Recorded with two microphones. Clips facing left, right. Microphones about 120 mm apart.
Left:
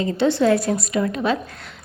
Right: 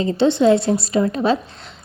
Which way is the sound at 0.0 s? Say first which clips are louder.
Right 3 dB; 25° right (ahead or behind).